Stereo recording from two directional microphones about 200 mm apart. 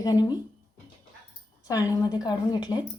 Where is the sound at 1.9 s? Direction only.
20° left (ahead or behind).